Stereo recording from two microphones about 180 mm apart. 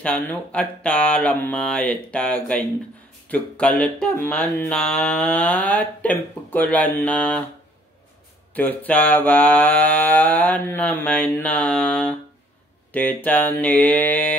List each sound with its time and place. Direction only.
0.0 s speech: 5° left (ahead or behind)
8.5 s speech: 10° left (ahead or behind)